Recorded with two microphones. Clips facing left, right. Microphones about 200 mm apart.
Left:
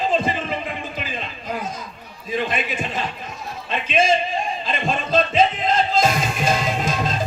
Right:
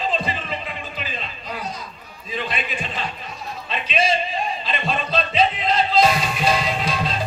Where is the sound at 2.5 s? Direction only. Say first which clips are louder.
Left 3 dB; 45° left (ahead or behind).